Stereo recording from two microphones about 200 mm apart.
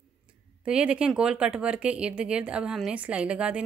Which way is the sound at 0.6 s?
5° right (ahead or behind).